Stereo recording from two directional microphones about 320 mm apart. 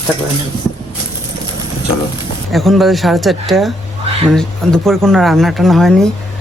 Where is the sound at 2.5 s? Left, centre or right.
Centre.